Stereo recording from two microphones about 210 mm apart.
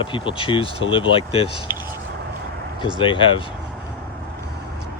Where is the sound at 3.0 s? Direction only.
25° left (ahead or behind).